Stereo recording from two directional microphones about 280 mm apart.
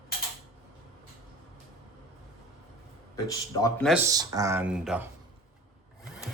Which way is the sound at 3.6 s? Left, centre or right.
Centre.